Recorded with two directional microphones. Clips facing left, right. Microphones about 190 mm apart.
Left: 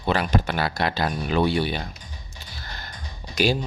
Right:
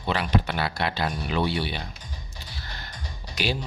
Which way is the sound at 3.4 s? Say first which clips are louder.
Left 7 dB; 45° left (ahead or behind).